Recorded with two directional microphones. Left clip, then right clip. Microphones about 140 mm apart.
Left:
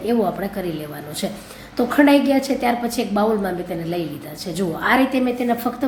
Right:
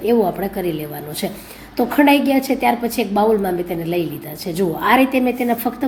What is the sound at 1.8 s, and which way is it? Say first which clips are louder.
A woman's voice: right 1 dB; 20° right (ahead or behind).